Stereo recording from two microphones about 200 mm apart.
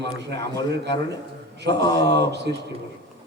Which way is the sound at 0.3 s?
20° left (ahead or behind).